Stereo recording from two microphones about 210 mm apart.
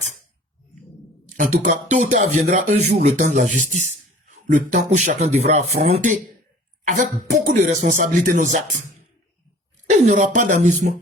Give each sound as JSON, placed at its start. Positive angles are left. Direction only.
{"t": 1.4, "sound": "speech", "side_deg": -35}
{"t": 9.8, "sound": "speech", "side_deg": -35}